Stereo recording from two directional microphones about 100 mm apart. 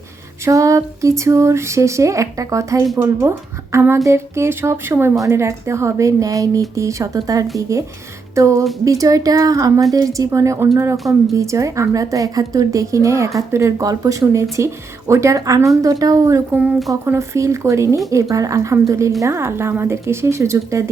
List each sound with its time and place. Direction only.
0.4 s a woman's voice: 30° right (ahead or behind)
3.0 s a woman's voice: 20° right (ahead or behind)
10.9 s a woman's voice: centre (ahead or behind)
11.3 s a woman's voice: 30° right (ahead or behind)
16.5 s speech: 15° right (ahead or behind)
17.1 s a woman's voice: 30° right (ahead or behind)